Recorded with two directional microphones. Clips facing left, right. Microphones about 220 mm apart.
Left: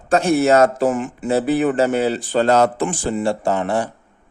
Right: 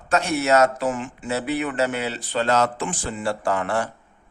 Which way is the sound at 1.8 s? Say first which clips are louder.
Left 7 dB; 45° left (ahead or behind).